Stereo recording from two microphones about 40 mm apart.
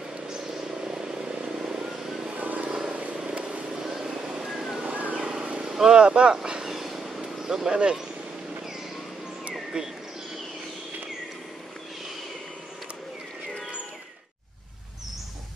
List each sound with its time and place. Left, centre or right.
0.3 s vehicle: centre
2.3 s vehicle: right
2.7 s vehicle: right
3.7 s vehicle: centre
4.0 s vehicle: right
4.5 s a sound: centre
5.1 s vehicle: right
5.6 s speech: centre
6.7 s cat: centre
7.2 s a sound: centre
9.8 s speech: right